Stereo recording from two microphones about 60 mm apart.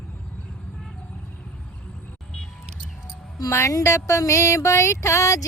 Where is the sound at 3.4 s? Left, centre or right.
Left.